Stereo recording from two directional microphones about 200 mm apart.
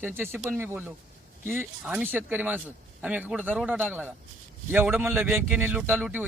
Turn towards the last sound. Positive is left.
turn(degrees=-10)  # may be behind; listen again after turning